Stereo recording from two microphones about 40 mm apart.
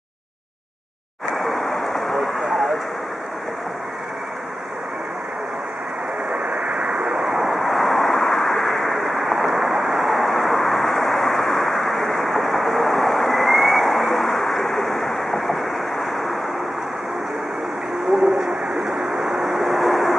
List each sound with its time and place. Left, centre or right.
1.3 s vehicle: centre
6.5 s vehicle: centre
7.4 s vehicle: centre
9.1 s a sound: centre
9.7 s vehicle: centre
18.1 s vehicle: centre